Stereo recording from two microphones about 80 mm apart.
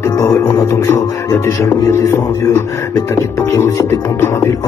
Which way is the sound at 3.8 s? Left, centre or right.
Left.